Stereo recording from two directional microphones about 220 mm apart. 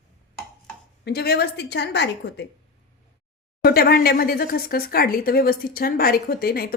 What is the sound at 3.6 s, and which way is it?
Speech, 45° left (ahead or behind).